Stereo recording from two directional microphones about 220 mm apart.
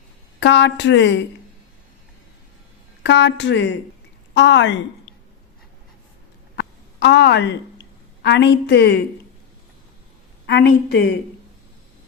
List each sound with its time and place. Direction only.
0.3 s a woman's voice: 55° left (ahead or behind)
3.0 s a woman's voice: 55° left (ahead or behind)
6.6 s a sound: 50° left (ahead or behind)
8.2 s a woman's voice: 50° left (ahead or behind)
10.4 s a woman's voice: 50° left (ahead or behind)